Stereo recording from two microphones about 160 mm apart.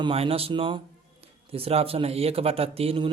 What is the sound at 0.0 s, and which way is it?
Speech, 35° right (ahead or behind).